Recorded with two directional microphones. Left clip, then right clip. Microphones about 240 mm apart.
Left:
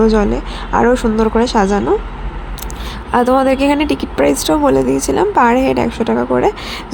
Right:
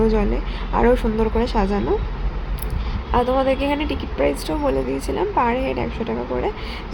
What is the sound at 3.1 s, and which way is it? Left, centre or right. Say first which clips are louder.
Speech: left 7 dB; left.